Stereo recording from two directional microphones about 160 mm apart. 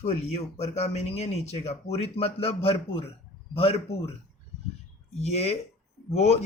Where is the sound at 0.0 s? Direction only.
45° left (ahead or behind).